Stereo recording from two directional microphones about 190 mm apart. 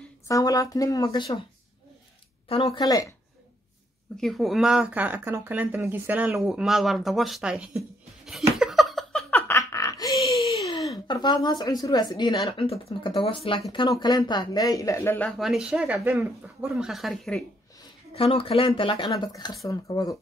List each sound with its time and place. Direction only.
0.3 s speech: 20° left (ahead or behind)
2.4 s speech: 30° left (ahead or behind)
4.2 s speech: centre (ahead or behind)
8.5 s laughter: centre (ahead or behind)
9.5 s a sound: 15° left (ahead or behind)
11.1 s speech: 25° left (ahead or behind); by 17.4 s centre (ahead or behind)
18.1 s speech: 30° left (ahead or behind)